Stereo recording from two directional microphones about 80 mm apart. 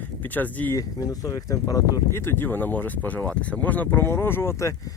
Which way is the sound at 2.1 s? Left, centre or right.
Left.